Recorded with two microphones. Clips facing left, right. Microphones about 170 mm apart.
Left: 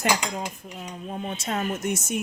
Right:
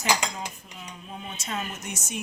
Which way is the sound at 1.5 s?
50° left (ahead or behind).